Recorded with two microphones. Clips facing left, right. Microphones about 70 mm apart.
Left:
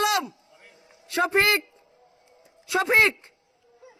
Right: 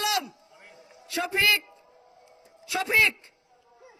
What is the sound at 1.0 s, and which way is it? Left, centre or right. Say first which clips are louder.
Speech: left 4 dB; left.